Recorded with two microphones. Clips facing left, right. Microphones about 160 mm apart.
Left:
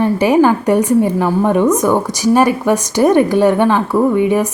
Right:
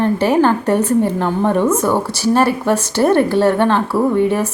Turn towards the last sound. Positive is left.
turn(degrees=15)  # may be behind; listen again after turning